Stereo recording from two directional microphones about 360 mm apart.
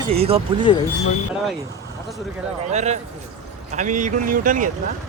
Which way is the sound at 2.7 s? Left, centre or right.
Centre.